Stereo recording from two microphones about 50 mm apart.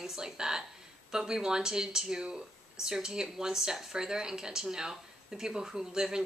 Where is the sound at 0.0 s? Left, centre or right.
Centre.